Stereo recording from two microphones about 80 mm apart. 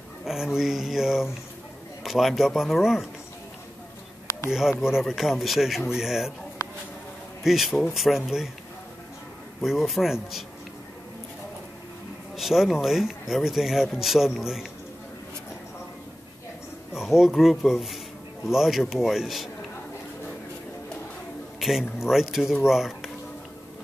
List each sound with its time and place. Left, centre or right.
0.2 s speech: centre
4.5 s speech: centre
6.6 s a sound: left
7.4 s speech: centre
9.6 s speech: centre
12.4 s speech: centre
16.9 s speech: centre
21.5 s speech: centre